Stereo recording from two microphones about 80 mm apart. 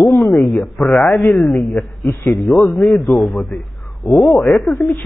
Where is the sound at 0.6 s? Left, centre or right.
Centre.